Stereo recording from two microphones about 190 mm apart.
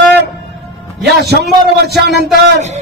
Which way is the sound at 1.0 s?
60° right (ahead or behind).